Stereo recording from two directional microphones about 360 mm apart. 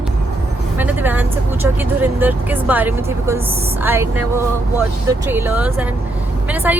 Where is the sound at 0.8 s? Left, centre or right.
Centre.